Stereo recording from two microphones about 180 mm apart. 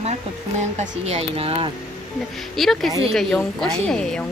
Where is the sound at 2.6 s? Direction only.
Centre (ahead or behind).